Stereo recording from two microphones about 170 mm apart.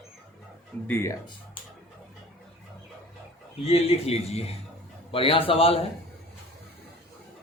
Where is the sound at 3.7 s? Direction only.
35° left (ahead or behind).